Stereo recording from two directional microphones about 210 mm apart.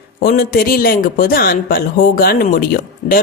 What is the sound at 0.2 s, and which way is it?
A man's voice, 45° left (ahead or behind).